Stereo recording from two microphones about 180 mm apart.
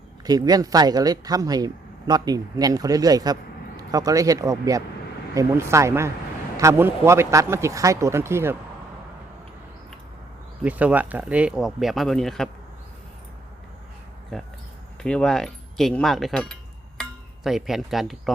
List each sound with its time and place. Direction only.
0.3 s speech: 20° right (ahead or behind)
10.6 s speech: 10° right (ahead or behind)
14.3 s speech: centre (ahead or behind)